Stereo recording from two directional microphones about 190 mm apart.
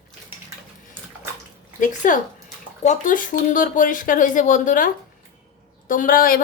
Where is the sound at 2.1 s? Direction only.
45° left (ahead or behind).